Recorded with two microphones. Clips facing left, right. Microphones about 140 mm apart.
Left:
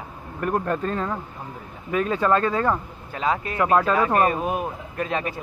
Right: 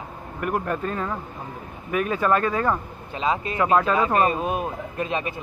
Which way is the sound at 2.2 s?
15° right (ahead or behind).